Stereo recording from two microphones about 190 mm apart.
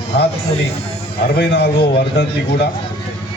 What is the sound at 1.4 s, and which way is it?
A man's voice, 65° left (ahead or behind).